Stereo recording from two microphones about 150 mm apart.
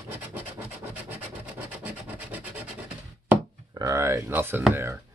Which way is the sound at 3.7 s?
20° right (ahead or behind).